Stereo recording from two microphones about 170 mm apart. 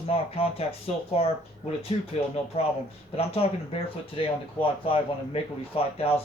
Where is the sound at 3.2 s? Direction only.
35° left (ahead or behind).